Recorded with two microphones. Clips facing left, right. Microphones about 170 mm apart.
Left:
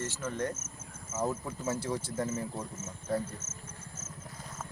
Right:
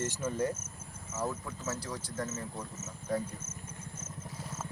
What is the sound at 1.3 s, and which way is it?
Speech, 20° left (ahead or behind).